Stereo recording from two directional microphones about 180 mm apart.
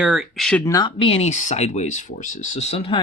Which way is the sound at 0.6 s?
20° left (ahead or behind).